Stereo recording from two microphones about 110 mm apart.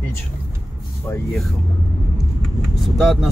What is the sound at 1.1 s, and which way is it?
Speech, 20° left (ahead or behind).